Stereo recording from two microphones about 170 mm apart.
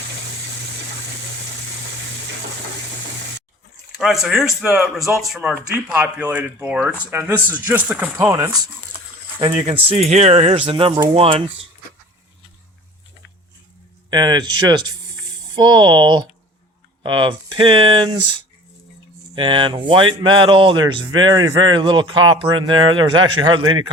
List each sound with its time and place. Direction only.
3.9 s speech: centre (ahead or behind); by 8.7 s 20° right (ahead or behind)
9.6 s speech: 35° right (ahead or behind)
14.1 s speech: 25° right (ahead or behind)
19.4 s speech: 30° right (ahead or behind)